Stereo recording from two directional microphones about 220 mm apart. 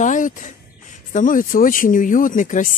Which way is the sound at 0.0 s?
35° left (ahead or behind).